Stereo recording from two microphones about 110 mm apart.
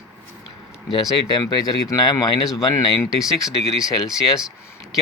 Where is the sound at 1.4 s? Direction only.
35° left (ahead or behind).